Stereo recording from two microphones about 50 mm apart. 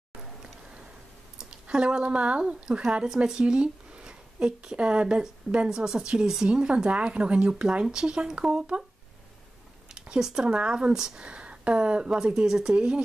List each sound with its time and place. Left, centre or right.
1.4 s a woman's voice: centre
9.9 s speech: centre